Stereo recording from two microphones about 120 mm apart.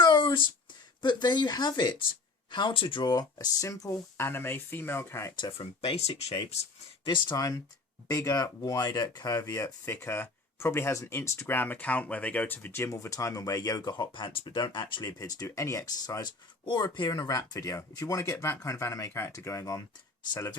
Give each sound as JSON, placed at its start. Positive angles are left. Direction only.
{"t": 0.0, "sound": "a sound", "side_deg": 40}
{"t": 1.0, "sound": "speech", "side_deg": 35}
{"t": 5.4, "sound": "speech", "side_deg": 50}
{"t": 7.0, "sound": "speech", "side_deg": 40}
{"t": 9.4, "sound": "speech", "side_deg": 20}
{"t": 15.2, "sound": "speech", "side_deg": 30}